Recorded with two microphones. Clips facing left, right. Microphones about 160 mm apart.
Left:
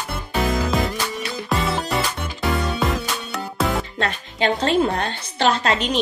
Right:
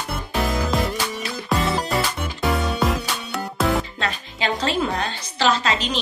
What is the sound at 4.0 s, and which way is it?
A woman's voice, 50° left (ahead or behind).